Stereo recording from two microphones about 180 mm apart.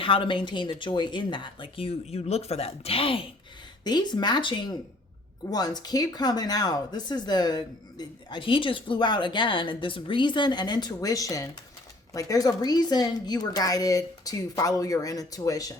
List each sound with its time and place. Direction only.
0.0 s speech: 30° left (ahead or behind)